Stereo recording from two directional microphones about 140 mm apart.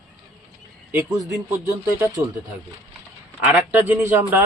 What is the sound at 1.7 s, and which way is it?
Speech, 25° right (ahead or behind).